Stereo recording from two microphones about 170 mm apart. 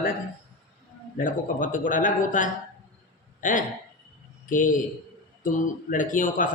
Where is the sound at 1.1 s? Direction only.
50° left (ahead or behind).